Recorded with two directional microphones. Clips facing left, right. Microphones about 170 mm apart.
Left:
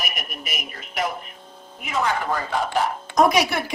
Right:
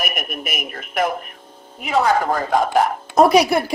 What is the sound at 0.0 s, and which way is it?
Speech, 55° right (ahead or behind).